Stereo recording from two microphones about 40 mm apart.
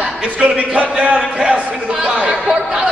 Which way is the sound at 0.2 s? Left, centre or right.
Right.